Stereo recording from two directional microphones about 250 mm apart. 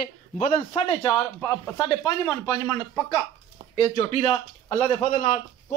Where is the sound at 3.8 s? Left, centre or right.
Left.